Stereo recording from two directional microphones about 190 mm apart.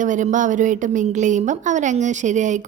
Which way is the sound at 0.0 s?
40° right (ahead or behind).